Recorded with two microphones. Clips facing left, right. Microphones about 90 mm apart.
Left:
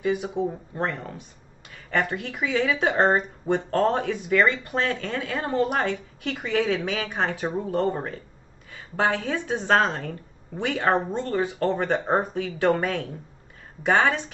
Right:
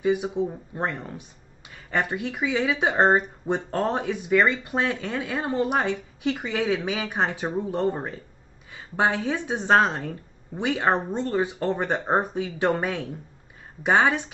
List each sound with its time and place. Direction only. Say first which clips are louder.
0.0 s speech: right 1 dB; 15° right (ahead or behind)